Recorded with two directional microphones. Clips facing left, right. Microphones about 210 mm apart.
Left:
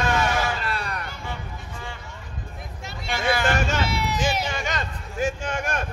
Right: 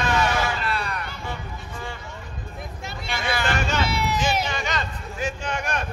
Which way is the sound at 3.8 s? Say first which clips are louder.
Right 1 dB; 55° right (ahead or behind).